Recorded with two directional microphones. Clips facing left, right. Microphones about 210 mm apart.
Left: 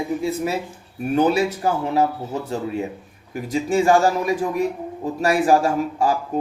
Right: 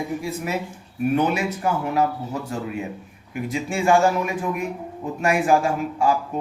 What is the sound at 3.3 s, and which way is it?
Speech, 40° left (ahead or behind).